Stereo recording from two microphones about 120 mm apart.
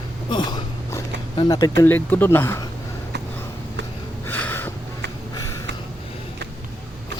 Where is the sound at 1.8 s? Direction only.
15° left (ahead or behind).